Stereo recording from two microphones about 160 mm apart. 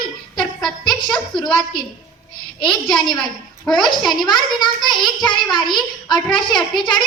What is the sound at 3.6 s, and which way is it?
Speech, centre (ahead or behind).